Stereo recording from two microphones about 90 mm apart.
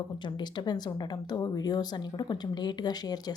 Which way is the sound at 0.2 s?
60° left (ahead or behind).